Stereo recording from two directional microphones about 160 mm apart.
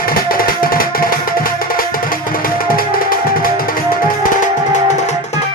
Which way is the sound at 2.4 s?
65° left (ahead or behind).